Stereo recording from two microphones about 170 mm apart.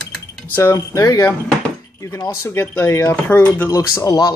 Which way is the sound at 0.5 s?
15° left (ahead or behind).